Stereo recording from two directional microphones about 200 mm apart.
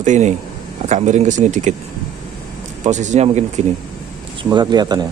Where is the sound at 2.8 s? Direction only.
35° right (ahead or behind).